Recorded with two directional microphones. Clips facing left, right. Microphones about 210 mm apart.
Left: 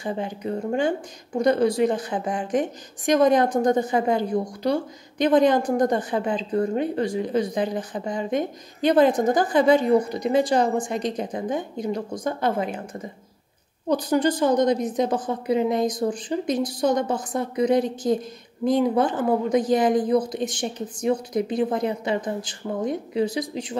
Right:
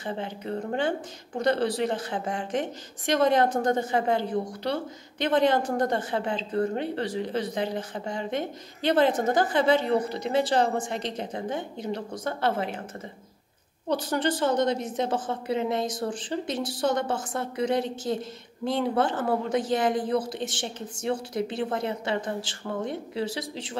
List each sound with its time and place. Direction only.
0.0 s a woman's voice: 15° left (ahead or behind)